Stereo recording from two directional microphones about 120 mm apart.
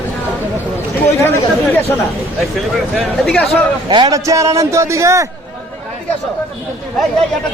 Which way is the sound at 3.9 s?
40° right (ahead or behind).